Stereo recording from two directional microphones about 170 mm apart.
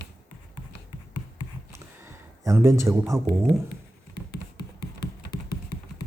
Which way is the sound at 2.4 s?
15° right (ahead or behind).